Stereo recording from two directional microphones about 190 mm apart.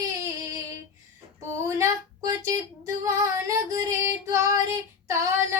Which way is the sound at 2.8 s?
15° right (ahead or behind).